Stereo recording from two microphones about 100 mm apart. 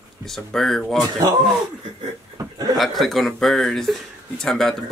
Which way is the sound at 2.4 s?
35° right (ahead or behind).